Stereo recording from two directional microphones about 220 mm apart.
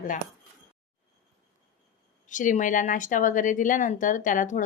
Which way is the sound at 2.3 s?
35° left (ahead or behind).